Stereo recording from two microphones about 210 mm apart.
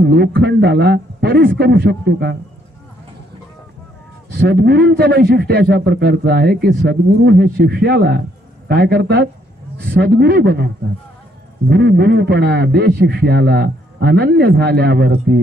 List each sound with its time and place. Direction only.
0.0 s a man's voice: 50° right (ahead or behind)
4.3 s a man's voice: 50° right (ahead or behind)
11.7 s a man's voice: 50° right (ahead or behind)